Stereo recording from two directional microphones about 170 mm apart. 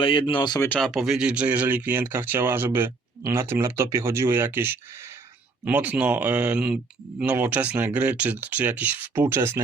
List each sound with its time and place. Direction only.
0.0 s speech: 30° left (ahead or behind)
0.7 s speech: centre (ahead or behind); by 9.6 s 15° right (ahead or behind)